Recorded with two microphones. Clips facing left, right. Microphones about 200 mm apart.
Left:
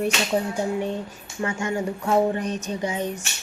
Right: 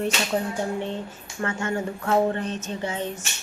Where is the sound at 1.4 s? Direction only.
15° left (ahead or behind).